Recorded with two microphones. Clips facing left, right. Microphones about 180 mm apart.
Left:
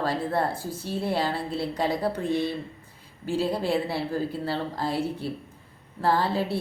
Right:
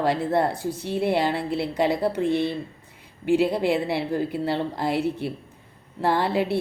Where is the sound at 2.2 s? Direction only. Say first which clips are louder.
Right 5 dB; 60° right (ahead or behind).